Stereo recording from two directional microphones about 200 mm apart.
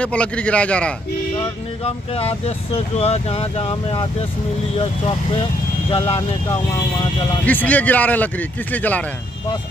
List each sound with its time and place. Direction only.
0.0 s a man's voice: 5° left (ahead or behind)
1.9 s speech: 30° left (ahead or behind)
7.4 s speech: 10° left (ahead or behind)